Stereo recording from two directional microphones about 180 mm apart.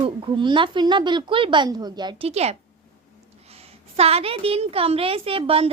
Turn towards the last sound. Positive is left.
turn(degrees=-30)  # may be behind; listen again after turning